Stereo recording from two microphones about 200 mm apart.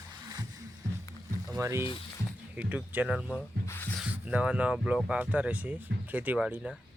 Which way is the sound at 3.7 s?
10° left (ahead or behind).